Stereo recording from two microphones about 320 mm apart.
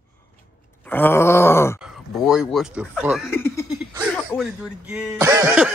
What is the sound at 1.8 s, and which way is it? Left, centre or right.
Speech, centre.